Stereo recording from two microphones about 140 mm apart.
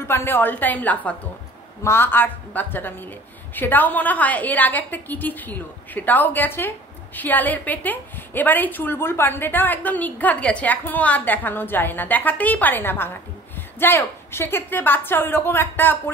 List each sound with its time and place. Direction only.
0.1 s a woman's voice: 15° left (ahead or behind)